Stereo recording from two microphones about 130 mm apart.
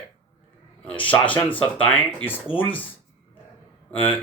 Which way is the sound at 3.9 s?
10° left (ahead or behind).